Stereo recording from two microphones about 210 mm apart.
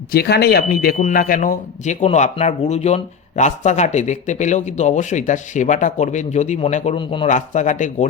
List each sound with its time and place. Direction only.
0.1 s speech: 50° left (ahead or behind); by 7.3 s 25° left (ahead or behind)
7.3 s speech: 35° left (ahead or behind)